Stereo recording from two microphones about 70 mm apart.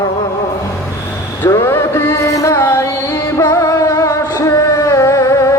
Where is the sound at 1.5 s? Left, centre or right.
Left.